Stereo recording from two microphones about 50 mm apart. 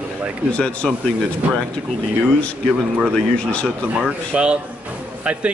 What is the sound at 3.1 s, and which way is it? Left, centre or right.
Speech, left.